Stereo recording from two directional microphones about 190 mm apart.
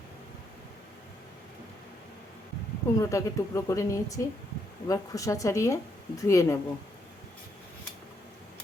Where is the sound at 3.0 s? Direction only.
15° left (ahead or behind).